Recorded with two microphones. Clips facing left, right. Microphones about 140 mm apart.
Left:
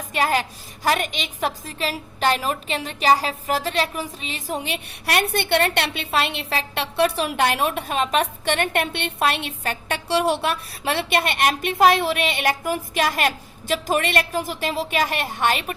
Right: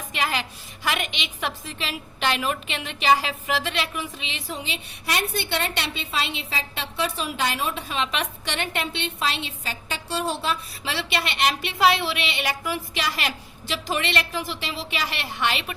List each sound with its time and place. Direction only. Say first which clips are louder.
0.1 s a woman's voice: left 6 dB; 45° left (ahead or behind)